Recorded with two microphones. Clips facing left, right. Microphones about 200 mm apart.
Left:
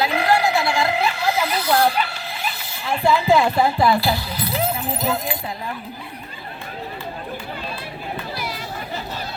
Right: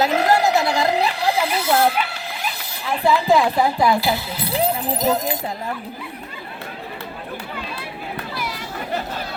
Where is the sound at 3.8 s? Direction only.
20° right (ahead or behind); by 5.7 s 40° right (ahead or behind).